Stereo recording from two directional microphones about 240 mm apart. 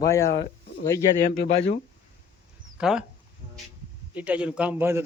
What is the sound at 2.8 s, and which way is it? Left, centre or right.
Speech, centre.